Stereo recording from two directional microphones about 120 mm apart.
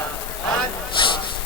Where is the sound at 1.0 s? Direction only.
45° left (ahead or behind).